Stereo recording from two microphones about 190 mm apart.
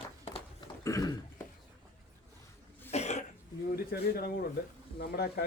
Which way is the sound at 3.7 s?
55° left (ahead or behind).